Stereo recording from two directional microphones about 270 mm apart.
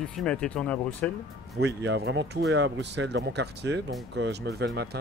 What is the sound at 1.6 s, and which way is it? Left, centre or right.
Speech, right.